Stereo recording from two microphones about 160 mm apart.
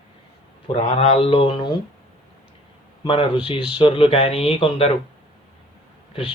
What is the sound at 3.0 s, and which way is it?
Speech, 35° left (ahead or behind).